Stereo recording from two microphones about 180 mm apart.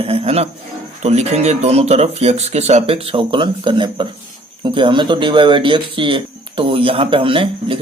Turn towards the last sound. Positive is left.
turn(degrees=-30)  # may be behind; listen again after turning